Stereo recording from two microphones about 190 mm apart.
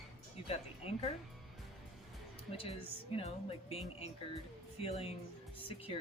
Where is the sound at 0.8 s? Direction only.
30° left (ahead or behind).